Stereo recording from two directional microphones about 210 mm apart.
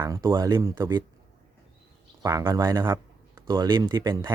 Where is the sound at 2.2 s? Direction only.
15° right (ahead or behind).